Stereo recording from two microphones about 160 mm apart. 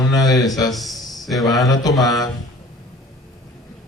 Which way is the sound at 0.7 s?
Centre (ahead or behind).